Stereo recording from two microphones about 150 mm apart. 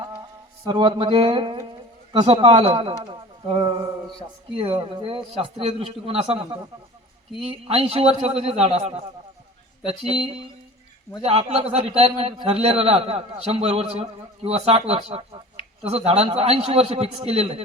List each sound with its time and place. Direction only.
0.6 s a man's voice: 30° right (ahead or behind)